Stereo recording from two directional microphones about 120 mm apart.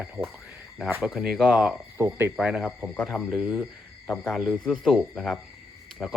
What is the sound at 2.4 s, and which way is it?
Speech, 5° right (ahead or behind).